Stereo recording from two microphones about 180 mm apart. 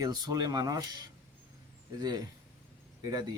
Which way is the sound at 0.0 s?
20° right (ahead or behind).